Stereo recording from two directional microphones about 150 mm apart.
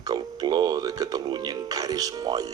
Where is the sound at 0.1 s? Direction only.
25° right (ahead or behind).